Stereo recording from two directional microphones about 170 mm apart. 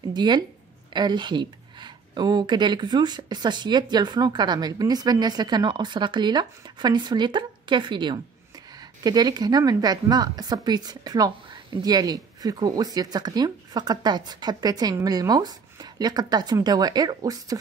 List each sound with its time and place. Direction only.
0.1 s speech: 25° right (ahead or behind)